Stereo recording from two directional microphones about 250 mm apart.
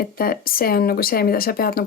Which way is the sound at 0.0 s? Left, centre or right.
Left.